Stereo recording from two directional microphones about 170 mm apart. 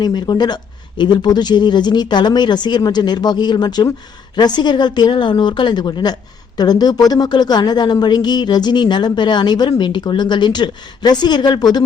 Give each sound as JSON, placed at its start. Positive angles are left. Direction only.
{"t": 0.0, "sound": "a woman's voice", "side_deg": 25}